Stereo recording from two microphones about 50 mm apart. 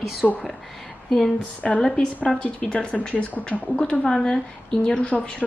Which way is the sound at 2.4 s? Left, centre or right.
Left.